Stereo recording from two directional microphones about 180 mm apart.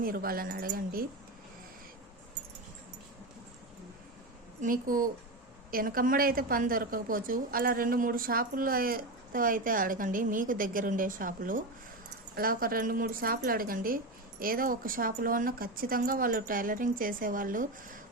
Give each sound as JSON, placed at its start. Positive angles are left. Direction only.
{"t": 0.0, "sound": "a woman's voice", "side_deg": -55}
{"t": 4.6, "sound": "a woman's voice", "side_deg": -50}